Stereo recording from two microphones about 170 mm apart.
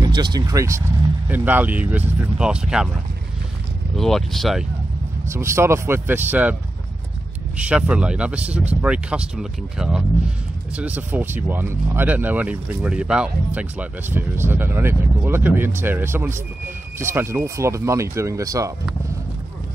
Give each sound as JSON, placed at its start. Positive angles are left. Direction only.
{"t": 0.0, "sound": "speech", "side_deg": -25}
{"t": 3.9, "sound": "speech", "side_deg": 0}
{"t": 5.3, "sound": "speech", "side_deg": -15}
{"t": 7.5, "sound": "speech", "side_deg": -10}